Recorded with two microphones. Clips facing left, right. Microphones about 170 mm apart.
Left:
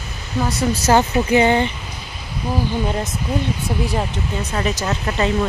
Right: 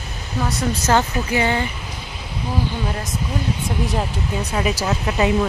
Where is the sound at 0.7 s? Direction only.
15° left (ahead or behind).